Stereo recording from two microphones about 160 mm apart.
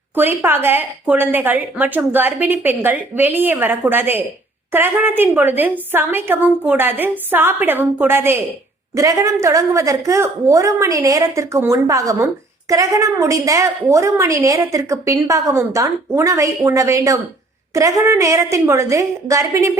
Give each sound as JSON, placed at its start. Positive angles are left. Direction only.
{"t": 0.2, "sound": "a woman's voice", "side_deg": -15}